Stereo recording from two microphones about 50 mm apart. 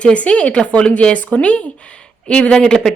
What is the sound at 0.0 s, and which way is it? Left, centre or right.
A woman's voice, left.